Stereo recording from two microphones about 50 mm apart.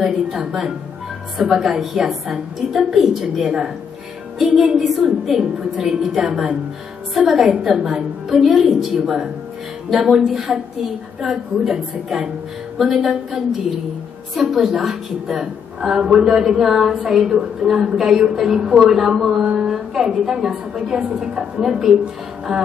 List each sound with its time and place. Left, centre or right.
0.5 s a woman's voice: centre
8.3 s a woman's voice: centre
8.5 s a woman's voice: centre
14.3 s a woman's voice: centre
19.4 s a sound: right
19.7 s music: centre
20.2 s a woman's voice: centre